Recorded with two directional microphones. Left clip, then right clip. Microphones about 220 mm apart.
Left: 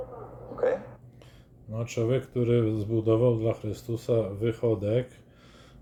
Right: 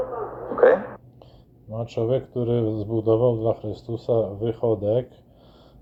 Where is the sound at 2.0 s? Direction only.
15° left (ahead or behind).